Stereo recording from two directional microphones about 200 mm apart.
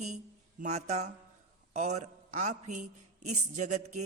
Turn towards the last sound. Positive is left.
turn(degrees=-35)  # may be behind; listen again after turning